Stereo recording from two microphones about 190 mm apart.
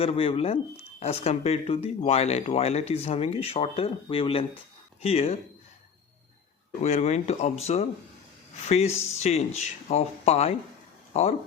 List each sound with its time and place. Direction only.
0.0 s speech: 30° left (ahead or behind)
6.8 s speech: 35° left (ahead or behind)